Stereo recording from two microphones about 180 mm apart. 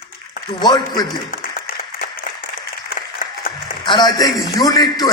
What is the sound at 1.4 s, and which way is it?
Applause, 60° left (ahead or behind).